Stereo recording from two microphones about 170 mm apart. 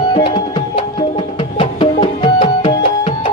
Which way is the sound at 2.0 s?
35° left (ahead or behind).